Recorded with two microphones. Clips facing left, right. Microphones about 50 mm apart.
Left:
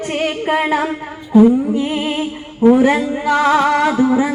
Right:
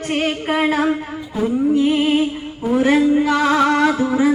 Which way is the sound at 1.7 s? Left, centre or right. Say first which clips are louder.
Right 3 dB; left.